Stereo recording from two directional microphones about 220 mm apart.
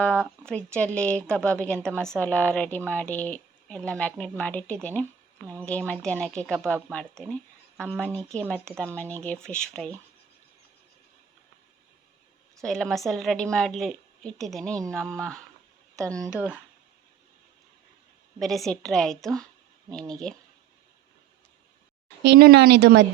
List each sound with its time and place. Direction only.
0.0 s speech: 5° left (ahead or behind)
12.5 s speech: centre (ahead or behind)
16.2 s speech: 10° right (ahead or behind)
18.3 s speech: centre (ahead or behind)
22.2 s speech: 50° right (ahead or behind)